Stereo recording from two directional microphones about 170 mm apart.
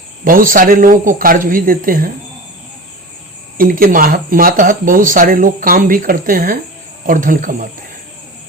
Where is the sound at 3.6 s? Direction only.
55° right (ahead or behind).